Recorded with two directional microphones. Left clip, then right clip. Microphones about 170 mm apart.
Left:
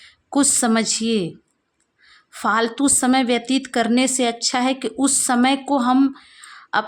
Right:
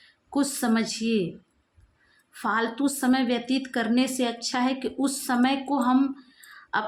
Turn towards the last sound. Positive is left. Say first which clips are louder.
# left 6 dB
turn(degrees=45)  # may be behind; listen again after turning